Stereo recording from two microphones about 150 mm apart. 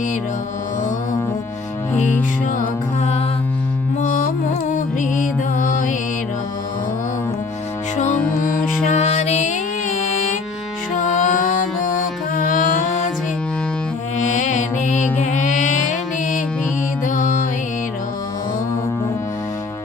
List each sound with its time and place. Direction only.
4.0 s music: 60° left (ahead or behind)
8.4 s music: 55° left (ahead or behind)
10.9 s music: 60° left (ahead or behind)
14.2 s music: 55° left (ahead or behind)